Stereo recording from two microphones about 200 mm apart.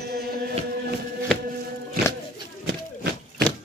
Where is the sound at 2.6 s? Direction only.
55° right (ahead or behind).